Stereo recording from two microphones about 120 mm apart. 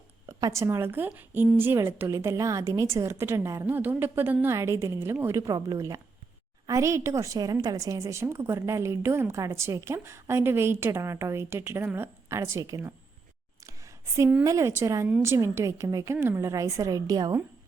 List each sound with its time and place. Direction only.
0.3 s a woman's voice: 30° right (ahead or behind)
14.4 s a woman's voice: 25° right (ahead or behind)